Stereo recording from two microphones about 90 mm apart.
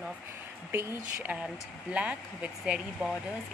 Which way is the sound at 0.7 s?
25° right (ahead or behind).